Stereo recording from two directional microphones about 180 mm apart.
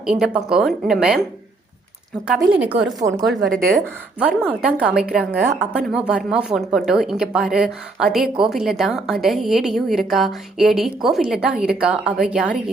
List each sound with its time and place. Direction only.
0.0 s a woman's voice: 5° right (ahead or behind)
2.2 s a woman's voice: 5° right (ahead or behind)
3.0 s speech: 20° right (ahead or behind)
4.2 s a woman's voice: 5° right (ahead or behind)